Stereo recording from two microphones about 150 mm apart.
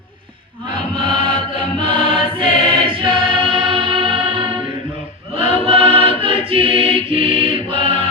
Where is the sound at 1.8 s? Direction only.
35° right (ahead or behind).